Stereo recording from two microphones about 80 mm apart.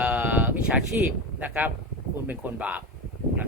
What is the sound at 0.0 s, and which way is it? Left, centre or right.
Sheep, centre.